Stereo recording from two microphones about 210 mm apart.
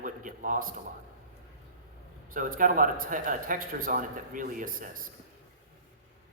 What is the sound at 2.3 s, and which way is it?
A man's voice, 40° right (ahead or behind).